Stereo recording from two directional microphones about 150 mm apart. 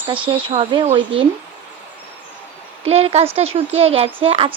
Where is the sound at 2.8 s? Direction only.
45° right (ahead or behind).